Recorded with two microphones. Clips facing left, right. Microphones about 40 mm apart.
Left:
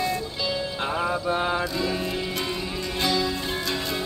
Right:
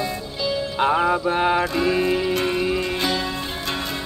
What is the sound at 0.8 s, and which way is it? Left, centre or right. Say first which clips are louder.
Music: right 8 dB; right.